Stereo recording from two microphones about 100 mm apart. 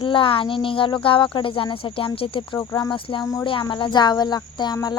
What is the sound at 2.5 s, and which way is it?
Music, 40° left (ahead or behind).